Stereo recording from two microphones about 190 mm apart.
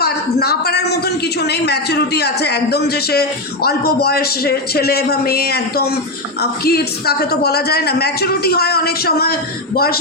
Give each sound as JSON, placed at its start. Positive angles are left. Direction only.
{"t": 0.0, "sound": "a man's voice", "side_deg": 55}